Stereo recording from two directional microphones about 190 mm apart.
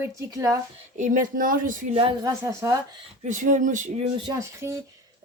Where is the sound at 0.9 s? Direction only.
45° right (ahead or behind).